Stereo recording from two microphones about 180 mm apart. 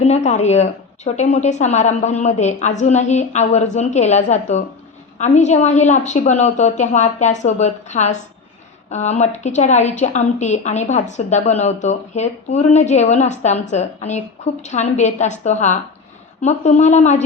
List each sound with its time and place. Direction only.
0.0 s a woman's voice: 40° left (ahead or behind)